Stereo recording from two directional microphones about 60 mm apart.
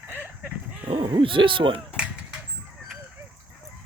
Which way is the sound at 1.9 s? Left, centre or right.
Centre.